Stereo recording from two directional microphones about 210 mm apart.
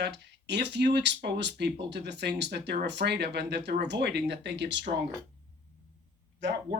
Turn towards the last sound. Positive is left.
turn(degrees=-55)  # may be behind; listen again after turning